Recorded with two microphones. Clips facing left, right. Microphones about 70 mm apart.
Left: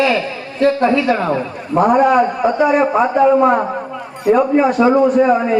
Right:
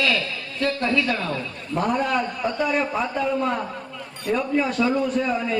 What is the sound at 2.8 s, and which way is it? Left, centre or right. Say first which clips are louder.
A man's voice: left 12 dB; left.